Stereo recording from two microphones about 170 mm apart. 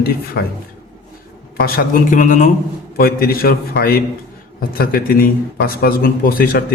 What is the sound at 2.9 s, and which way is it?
Speech, 60° left (ahead or behind).